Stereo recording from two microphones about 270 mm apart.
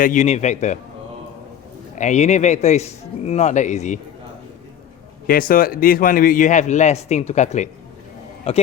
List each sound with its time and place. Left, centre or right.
0.0 s a man's voice: left
2.0 s a man's voice: left
5.2 s a man's voice: left